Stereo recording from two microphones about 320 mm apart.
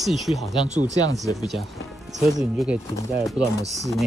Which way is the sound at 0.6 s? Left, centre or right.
Right.